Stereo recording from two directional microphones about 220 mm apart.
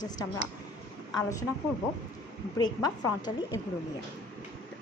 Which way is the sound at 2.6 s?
20° left (ahead or behind).